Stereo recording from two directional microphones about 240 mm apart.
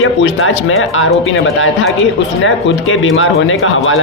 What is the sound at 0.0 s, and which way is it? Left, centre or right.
Speech, left.